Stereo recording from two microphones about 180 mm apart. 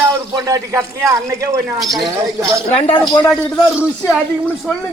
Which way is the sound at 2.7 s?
35° left (ahead or behind).